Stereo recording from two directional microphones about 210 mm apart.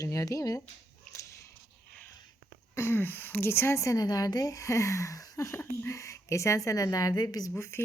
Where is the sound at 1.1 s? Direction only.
15° left (ahead or behind).